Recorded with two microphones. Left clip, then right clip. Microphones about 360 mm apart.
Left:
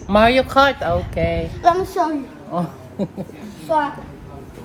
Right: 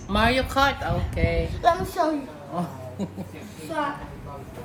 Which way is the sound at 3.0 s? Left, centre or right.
Left.